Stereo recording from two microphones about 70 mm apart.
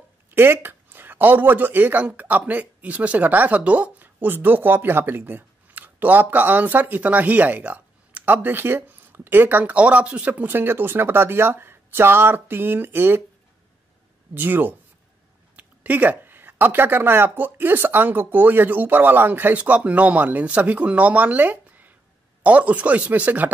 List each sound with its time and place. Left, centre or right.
0.3 s a man's voice: right
14.3 s a man's voice: right